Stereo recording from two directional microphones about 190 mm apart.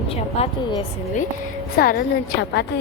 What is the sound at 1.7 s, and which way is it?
Speech, 55° left (ahead or behind).